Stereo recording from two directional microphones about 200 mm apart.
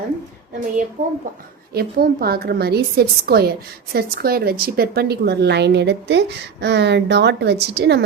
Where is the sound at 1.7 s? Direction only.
50° right (ahead or behind).